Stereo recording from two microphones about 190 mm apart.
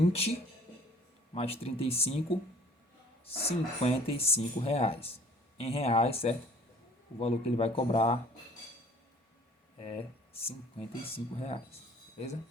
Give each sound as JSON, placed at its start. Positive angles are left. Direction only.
{"t": 0.0, "sound": "speech", "side_deg": 30}
{"t": 1.3, "sound": "speech", "side_deg": 30}
{"t": 3.2, "sound": "speech", "side_deg": 30}
{"t": 9.8, "sound": "speech", "side_deg": 30}